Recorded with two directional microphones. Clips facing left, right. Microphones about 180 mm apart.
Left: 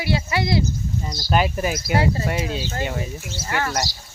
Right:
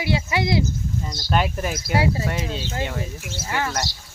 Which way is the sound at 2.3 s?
5° left (ahead or behind).